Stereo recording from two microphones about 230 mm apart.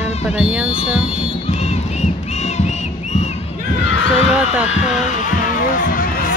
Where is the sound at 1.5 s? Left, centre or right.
Left.